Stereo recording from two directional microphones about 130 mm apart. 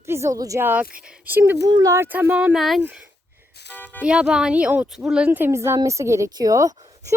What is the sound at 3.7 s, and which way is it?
Speech, 15° left (ahead or behind).